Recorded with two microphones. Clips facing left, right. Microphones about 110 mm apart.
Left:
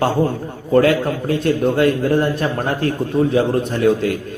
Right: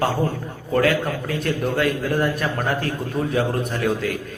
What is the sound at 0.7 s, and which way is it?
A man's voice, 30° left (ahead or behind).